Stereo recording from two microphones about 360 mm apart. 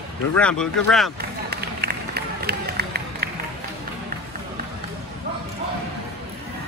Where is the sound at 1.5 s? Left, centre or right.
Right.